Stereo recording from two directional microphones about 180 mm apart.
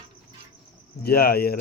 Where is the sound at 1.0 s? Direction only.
60° left (ahead or behind).